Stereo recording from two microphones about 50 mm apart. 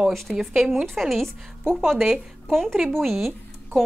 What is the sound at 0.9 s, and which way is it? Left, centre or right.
A woman's voice, centre.